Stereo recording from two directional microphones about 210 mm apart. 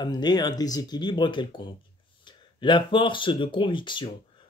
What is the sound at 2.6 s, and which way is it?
Speech, 20° left (ahead or behind).